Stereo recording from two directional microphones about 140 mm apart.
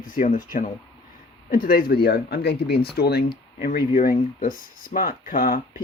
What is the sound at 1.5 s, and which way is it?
Speech, 85° left.